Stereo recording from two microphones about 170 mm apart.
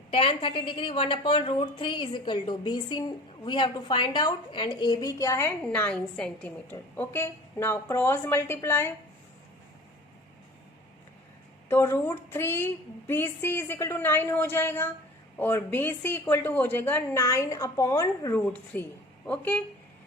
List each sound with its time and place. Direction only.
0.1 s a woman's voice: 30° left (ahead or behind); by 8.9 s 15° left (ahead or behind)
11.7 s a woman's voice: 15° left (ahead or behind)